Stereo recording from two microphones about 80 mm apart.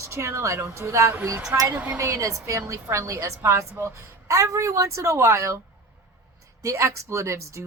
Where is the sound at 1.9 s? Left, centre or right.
Right.